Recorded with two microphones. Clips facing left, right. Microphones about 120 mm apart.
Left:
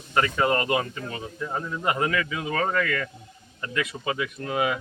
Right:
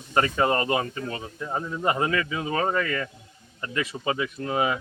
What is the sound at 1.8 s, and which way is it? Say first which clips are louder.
Speech: right 1 dB; 30° right (ahead or behind).